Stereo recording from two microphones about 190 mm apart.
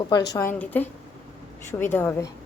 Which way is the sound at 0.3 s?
10° left (ahead or behind).